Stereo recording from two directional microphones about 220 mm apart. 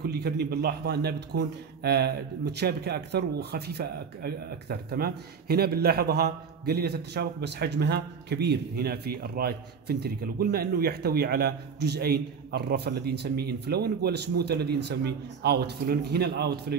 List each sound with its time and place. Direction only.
0.0 s a man's voice: 45° right (ahead or behind)